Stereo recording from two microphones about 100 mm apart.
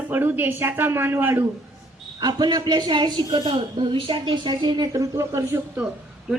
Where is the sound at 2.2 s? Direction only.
40° right (ahead or behind).